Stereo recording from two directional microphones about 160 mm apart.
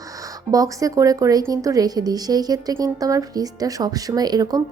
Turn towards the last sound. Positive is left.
turn(degrees=-25)  # may be behind; listen again after turning